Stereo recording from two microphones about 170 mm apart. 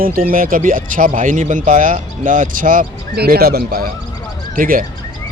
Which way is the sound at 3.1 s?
70° right (ahead or behind).